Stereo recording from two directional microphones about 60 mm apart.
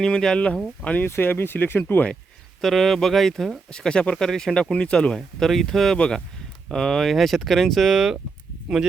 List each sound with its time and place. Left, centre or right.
0.0 s speech: centre
1.0 s speech: left
2.6 s speech: centre
3.7 s speech: centre
5.1 s speech: centre